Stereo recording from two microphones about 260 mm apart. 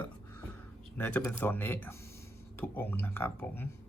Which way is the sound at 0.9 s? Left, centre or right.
Centre.